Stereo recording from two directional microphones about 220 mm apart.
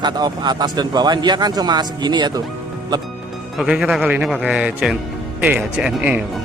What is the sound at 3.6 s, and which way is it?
Speech, 5° right (ahead or behind).